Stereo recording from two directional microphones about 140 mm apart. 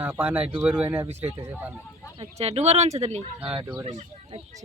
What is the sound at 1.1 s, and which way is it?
Speech, 50° right (ahead or behind).